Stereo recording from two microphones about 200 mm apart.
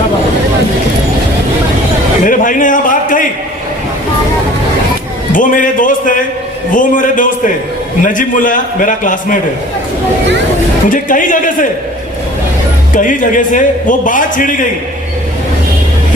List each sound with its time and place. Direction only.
2.2 s a man's voice: 40° left (ahead or behind)
5.3 s a sound: 40° left (ahead or behind)
6.7 s a man's voice: 40° left (ahead or behind)
10.8 s a man's voice: 40° left (ahead or behind)
12.9 s a man's voice: 40° left (ahead or behind)